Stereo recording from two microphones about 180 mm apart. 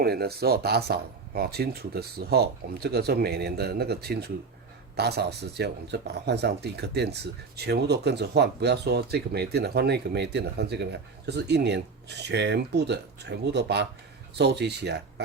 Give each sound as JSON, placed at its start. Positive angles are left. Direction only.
{"t": 0.0, "sound": "speech", "side_deg": -60}